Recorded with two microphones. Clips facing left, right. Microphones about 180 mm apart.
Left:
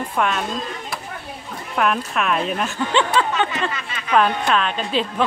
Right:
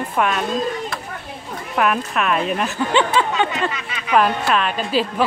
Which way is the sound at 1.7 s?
Centre (ahead or behind).